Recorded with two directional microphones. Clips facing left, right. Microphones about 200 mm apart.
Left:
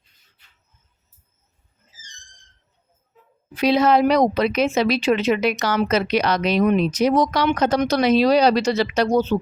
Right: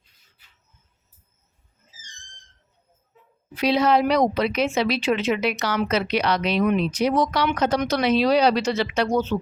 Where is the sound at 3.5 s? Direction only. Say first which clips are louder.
Left 3 dB; 45° left (ahead or behind).